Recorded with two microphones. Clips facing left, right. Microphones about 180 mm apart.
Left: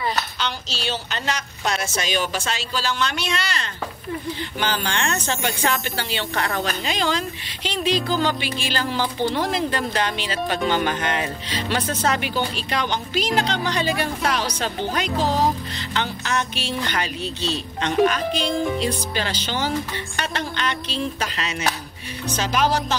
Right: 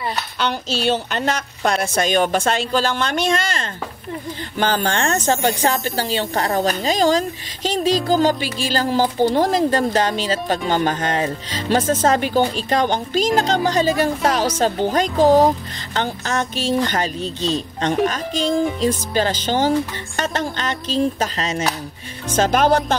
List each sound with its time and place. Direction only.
0.4 s speech: 55° right (ahead or behind)